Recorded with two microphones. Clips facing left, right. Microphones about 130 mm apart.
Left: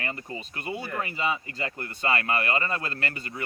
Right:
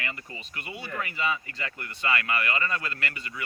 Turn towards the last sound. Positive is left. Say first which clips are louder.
# left 2 dB
turn(degrees=35)  # may be behind; listen again after turning